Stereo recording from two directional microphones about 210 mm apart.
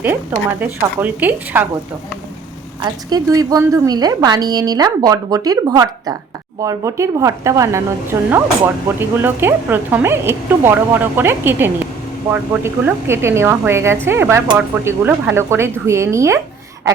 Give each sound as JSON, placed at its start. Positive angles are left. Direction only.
{"t": 0.6, "sound": "speech", "side_deg": -10}
{"t": 2.8, "sound": "speech", "side_deg": -20}